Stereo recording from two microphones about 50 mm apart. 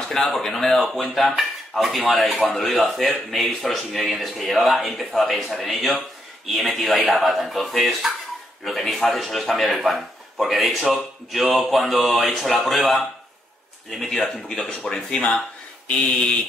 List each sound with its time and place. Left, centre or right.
0.0 s a sound: centre
0.3 s a man's voice: centre
14.7 s a man's voice: centre
16.0 s a man's voice: left